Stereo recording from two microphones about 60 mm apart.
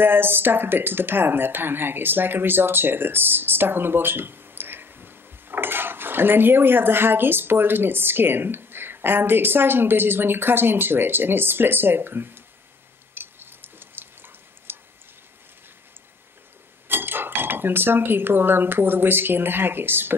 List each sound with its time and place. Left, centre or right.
0.0 s speech: right
13.1 s a sound: right
16.8 s speech: right